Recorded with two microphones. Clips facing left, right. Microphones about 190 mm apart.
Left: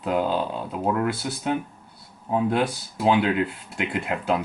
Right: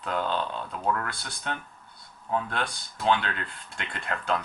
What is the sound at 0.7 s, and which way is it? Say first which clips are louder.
Speech: left 6 dB; 20° left (ahead or behind).